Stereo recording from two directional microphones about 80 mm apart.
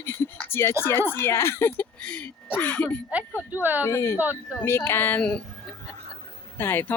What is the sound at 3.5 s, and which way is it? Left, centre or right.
Speech, right.